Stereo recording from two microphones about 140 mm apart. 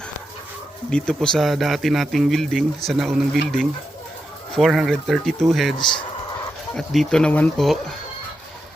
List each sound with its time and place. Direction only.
0.9 s a man's voice: 5° left (ahead or behind)
5.8 s speech: 35° left (ahead or behind)
6.7 s a man's voice: 5° left (ahead or behind)